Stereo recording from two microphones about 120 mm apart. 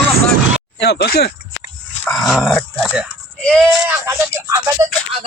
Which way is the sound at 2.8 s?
10° right (ahead or behind).